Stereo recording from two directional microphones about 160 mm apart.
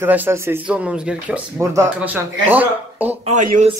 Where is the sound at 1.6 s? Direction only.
20° right (ahead or behind).